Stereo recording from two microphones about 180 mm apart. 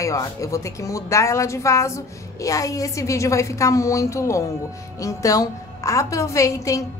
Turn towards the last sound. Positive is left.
turn(degrees=15)  # may be behind; listen again after turning